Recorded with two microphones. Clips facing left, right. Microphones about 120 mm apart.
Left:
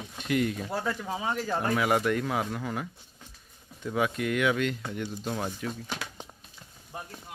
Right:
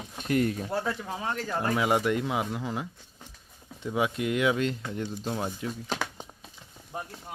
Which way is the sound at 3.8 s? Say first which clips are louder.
Even; 20° right (ahead or behind).